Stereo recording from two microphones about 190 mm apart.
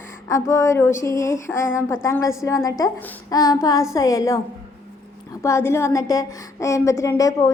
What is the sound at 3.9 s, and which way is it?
Speech, 20° left (ahead or behind).